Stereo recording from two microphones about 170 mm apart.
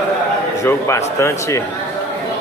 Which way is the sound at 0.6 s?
15° left (ahead or behind).